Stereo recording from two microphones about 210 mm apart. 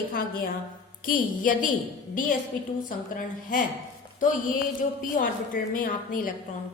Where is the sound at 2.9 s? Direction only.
40° left (ahead or behind).